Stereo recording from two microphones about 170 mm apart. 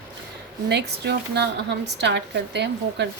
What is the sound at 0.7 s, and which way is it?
Speech, 80° right.